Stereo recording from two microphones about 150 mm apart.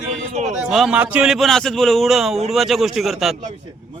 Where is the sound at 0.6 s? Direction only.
5° right (ahead or behind).